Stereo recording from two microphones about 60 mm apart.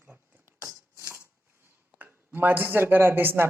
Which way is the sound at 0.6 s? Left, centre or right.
Right.